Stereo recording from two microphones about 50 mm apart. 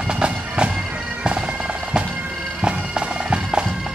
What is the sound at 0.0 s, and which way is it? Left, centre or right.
Bagpipes, centre.